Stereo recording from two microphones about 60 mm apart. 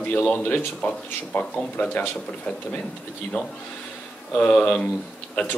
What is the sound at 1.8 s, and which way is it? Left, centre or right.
Speech, left.